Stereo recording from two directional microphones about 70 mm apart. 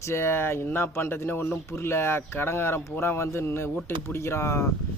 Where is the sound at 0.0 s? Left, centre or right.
Left.